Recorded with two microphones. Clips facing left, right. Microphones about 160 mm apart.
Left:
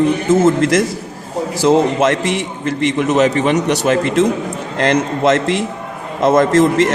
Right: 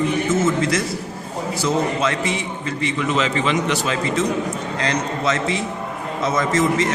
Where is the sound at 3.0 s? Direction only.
50° left (ahead or behind).